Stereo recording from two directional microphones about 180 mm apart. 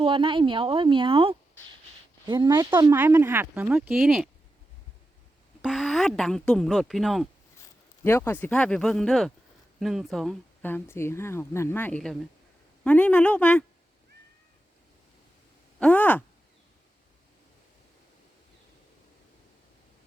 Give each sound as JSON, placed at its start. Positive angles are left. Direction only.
{"t": 0.0, "sound": "speech", "side_deg": -30}
{"t": 2.9, "sound": "speech", "side_deg": -10}
{"t": 5.6, "sound": "speech", "side_deg": 0}
{"t": 7.6, "sound": "a man's voice", "side_deg": 15}
{"t": 15.8, "sound": "speech", "side_deg": 10}